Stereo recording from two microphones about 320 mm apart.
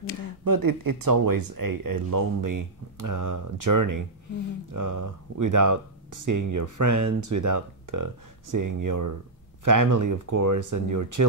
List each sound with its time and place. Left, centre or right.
0.5 s speech: right